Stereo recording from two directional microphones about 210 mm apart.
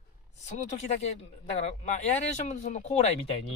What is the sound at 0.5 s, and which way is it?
Speech, 35° left (ahead or behind).